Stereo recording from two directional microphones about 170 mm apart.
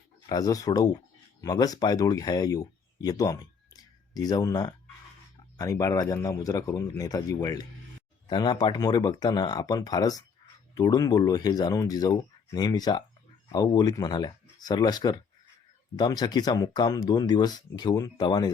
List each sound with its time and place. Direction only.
0.3 s speech: 20° left (ahead or behind)